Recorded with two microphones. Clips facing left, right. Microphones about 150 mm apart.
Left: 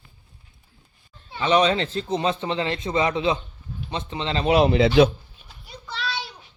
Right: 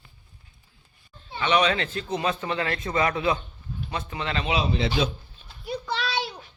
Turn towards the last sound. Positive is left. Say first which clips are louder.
# right 3 dB
turn(degrees=-60)  # may be behind; listen again after turning